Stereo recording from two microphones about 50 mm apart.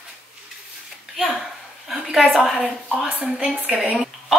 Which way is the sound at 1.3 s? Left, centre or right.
Centre.